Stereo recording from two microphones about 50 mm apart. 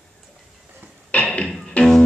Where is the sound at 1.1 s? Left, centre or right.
Left.